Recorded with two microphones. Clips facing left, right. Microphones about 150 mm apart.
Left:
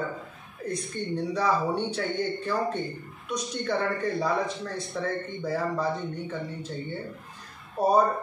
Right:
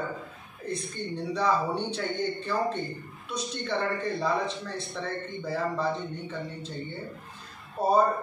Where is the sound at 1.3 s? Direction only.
10° left (ahead or behind).